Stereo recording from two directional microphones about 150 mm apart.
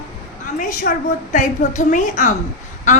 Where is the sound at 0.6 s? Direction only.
60° left (ahead or behind).